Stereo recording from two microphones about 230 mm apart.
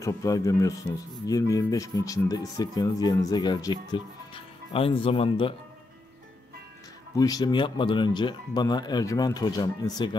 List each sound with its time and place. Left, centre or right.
0.0 s speech: centre
7.2 s speech: centre